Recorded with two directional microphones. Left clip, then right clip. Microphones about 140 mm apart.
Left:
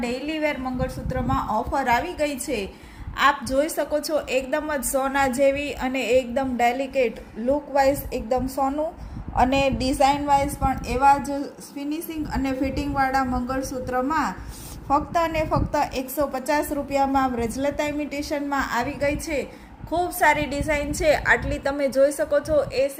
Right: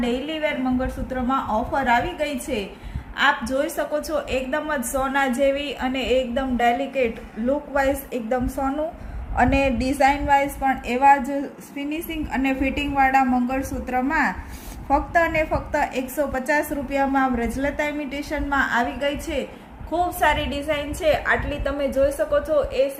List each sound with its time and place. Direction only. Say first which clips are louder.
0.0 s a woman's voice: right 1 dB; 30° left (ahead or behind)
19.9 s a woman's voice: even; 40° left (ahead or behind)